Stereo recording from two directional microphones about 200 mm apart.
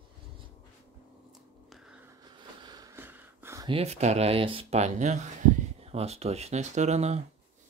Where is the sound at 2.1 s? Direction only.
20° right (ahead or behind).